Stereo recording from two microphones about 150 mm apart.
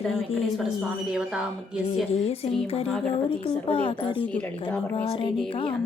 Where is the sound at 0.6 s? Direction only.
Centre (ahead or behind).